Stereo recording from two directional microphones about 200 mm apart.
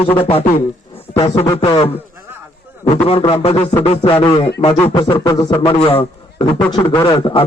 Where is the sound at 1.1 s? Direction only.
25° left (ahead or behind).